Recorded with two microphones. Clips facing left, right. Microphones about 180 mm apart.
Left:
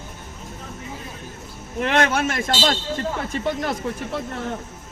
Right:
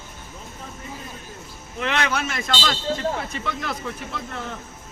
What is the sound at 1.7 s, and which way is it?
Speech, 50° left (ahead or behind).